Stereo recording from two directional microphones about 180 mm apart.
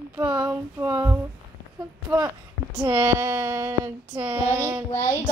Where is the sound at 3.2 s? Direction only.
15° right (ahead or behind).